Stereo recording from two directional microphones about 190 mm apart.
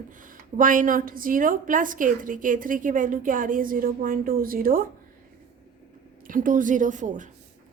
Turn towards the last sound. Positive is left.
turn(degrees=-40)  # may be behind; listen again after turning